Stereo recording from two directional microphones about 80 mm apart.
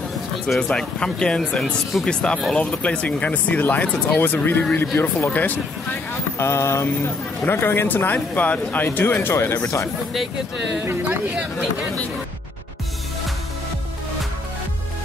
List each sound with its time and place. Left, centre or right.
0.6 s speech: centre
6.3 s a sound: left
7.4 s speech: left
10.8 s speech: right